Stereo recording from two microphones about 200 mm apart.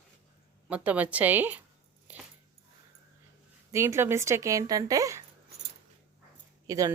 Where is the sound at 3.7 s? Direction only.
15° right (ahead or behind).